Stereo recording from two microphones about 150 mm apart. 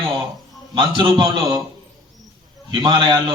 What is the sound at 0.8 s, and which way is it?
Speech, 35° right (ahead or behind).